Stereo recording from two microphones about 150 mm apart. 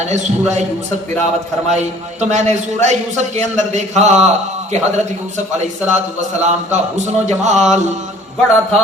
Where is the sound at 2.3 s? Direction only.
50° right (ahead or behind).